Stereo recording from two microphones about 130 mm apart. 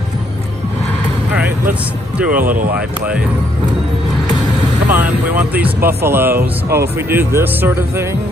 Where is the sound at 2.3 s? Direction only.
90° right.